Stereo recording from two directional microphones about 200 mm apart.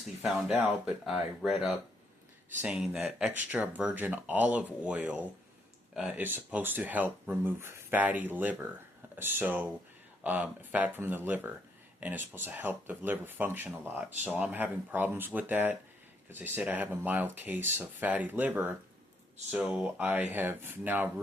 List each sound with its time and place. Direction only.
0.2 s speech: 5° right (ahead or behind)